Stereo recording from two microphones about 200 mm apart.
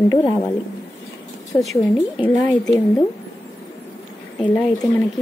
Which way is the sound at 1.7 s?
15° left (ahead or behind).